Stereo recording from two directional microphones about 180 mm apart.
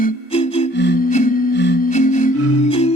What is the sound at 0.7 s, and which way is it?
Music, 75° left (ahead or behind).